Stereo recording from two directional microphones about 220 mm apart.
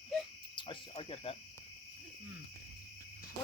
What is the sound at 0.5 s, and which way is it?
Speech, 20° left (ahead or behind).